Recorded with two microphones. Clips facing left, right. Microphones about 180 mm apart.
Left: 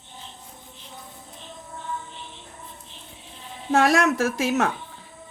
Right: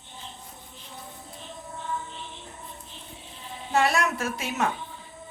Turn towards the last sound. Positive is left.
turn(degrees=90)